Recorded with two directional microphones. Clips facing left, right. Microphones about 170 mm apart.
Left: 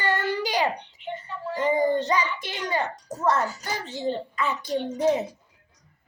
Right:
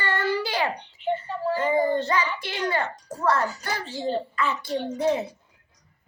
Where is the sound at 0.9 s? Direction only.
35° right (ahead or behind).